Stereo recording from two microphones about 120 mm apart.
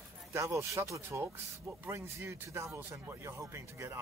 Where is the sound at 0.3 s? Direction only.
20° right (ahead or behind).